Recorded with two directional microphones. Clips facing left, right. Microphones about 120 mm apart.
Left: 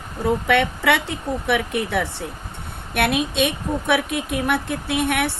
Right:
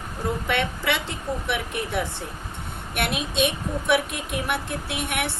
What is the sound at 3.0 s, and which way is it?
A woman's voice, 55° left (ahead or behind).